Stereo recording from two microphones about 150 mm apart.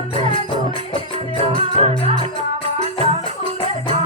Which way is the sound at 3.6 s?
35° left (ahead or behind).